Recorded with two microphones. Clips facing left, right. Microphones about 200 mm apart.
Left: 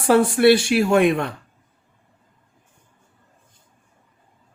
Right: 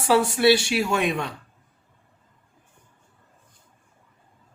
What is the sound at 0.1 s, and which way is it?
Speech, 55° left (ahead or behind).